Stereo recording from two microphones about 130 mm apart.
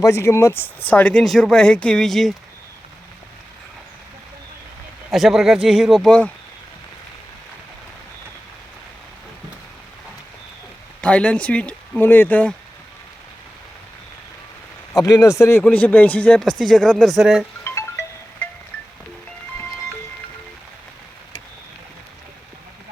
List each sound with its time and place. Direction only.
0.0 s speech: 20° left (ahead or behind); by 2.3 s centre (ahead or behind)
5.1 s speech: centre (ahead or behind)
11.0 s speech: 10° left (ahead or behind)
14.9 s speech: 30° left (ahead or behind)
15.6 s speech: 10° left (ahead or behind)
17.6 s music: 20° left (ahead or behind)